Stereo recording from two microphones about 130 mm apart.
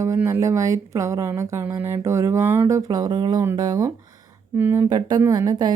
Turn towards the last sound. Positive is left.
turn(degrees=-30)  # may be behind; listen again after turning